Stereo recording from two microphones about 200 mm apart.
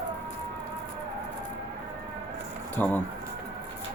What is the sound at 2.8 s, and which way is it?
Speech, 10° left (ahead or behind).